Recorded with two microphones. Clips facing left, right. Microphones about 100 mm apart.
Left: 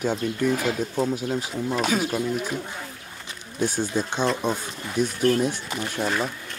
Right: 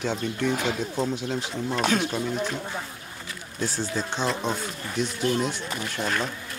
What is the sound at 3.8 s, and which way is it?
Speech, 15° left (ahead or behind).